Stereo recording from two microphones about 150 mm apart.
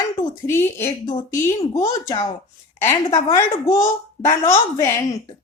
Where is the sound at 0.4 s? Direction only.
20° left (ahead or behind).